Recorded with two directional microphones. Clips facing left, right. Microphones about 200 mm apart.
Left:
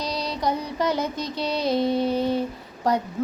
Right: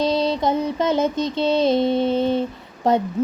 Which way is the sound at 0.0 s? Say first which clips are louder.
Right 7 dB; 25° right (ahead or behind).